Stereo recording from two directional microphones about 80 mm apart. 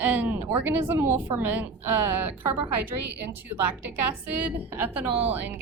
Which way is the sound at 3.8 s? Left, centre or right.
Right.